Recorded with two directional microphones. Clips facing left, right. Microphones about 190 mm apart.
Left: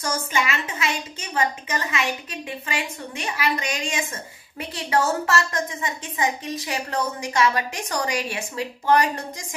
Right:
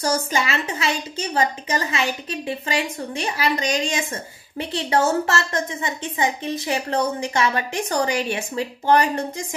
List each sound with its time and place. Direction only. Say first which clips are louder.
0.0 s a woman's voice: right 3 dB; 35° right (ahead or behind)